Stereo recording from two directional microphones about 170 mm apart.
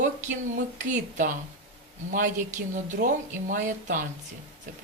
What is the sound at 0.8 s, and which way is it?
Speech, 50° right (ahead or behind).